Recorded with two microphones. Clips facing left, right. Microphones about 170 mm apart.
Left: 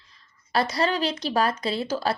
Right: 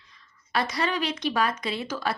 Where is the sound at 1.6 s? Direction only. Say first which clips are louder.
Left 4 dB; 35° left (ahead or behind).